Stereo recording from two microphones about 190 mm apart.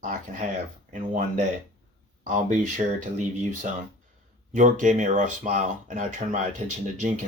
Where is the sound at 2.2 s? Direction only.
40° right (ahead or behind).